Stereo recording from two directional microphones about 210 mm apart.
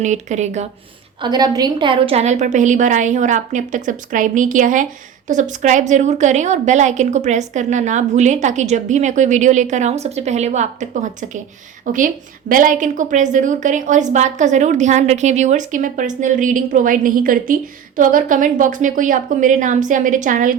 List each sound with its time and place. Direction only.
0.0 s a woman's voice: 35° right (ahead or behind)
1.2 s a woman's voice: 20° right (ahead or behind); by 20.6 s 40° right (ahead or behind)